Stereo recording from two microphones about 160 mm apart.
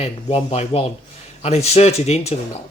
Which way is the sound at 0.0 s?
40° left (ahead or behind).